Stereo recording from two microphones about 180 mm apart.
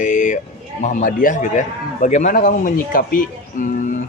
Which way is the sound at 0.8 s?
45° left (ahead or behind).